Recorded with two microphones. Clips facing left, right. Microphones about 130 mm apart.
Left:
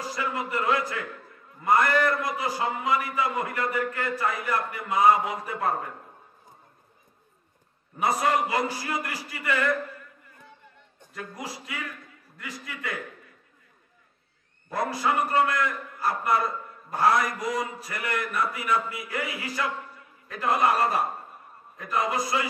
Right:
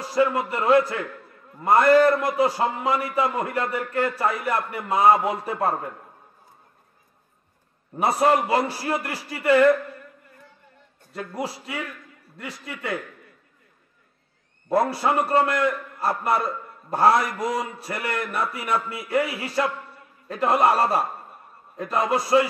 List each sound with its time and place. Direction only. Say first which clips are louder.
0.1 s a man's voice: right 10 dB; 30° right (ahead or behind)
8.0 s a man's voice: right 4 dB; 30° right (ahead or behind)
11.1 s a man's voice: right 7 dB; 30° right (ahead or behind)
14.7 s a man's voice: right 5 dB; 30° right (ahead or behind)